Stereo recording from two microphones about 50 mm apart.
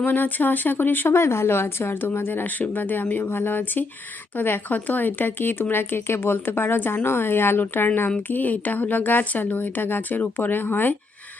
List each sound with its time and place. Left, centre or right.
0.0 s a woman's voice: left
1.1 s a woman's voice: left
8.3 s a woman's voice: left